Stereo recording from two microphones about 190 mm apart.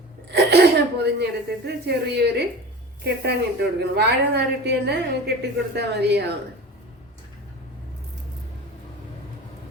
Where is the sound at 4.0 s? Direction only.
60° right (ahead or behind).